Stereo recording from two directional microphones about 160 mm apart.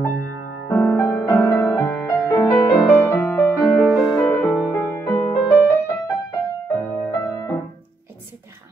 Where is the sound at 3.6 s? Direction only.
Centre (ahead or behind).